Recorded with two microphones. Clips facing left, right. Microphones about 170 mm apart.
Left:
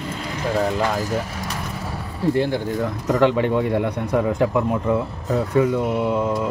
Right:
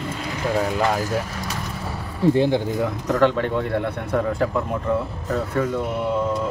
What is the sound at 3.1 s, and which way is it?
A man's voice, 15° left (ahead or behind).